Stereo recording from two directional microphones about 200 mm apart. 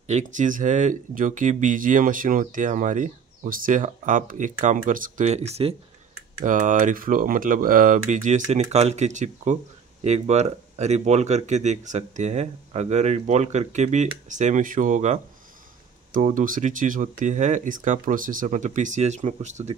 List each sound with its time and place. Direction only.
0.0 s speech: 35° right (ahead or behind)